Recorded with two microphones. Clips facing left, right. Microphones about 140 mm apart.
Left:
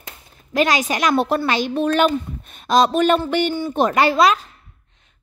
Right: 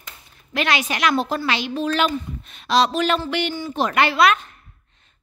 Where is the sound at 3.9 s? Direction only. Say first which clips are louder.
Left 1 dB; 40° left (ahead or behind).